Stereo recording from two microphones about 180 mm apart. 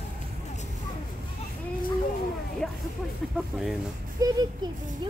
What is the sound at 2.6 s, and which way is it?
Music, centre (ahead or behind).